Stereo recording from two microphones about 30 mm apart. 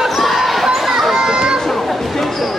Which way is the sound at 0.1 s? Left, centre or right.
Centre.